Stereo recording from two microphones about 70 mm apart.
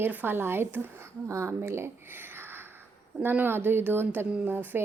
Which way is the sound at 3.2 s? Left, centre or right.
Right.